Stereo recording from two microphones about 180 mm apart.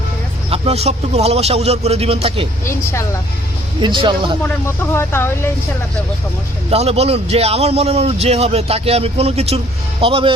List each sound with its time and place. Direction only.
0.5 s a man's voice: 35° right (ahead or behind)
3.8 s speech: 25° right (ahead or behind)
4.4 s speech: 15° left (ahead or behind)
6.7 s a man's voice: 35° right (ahead or behind)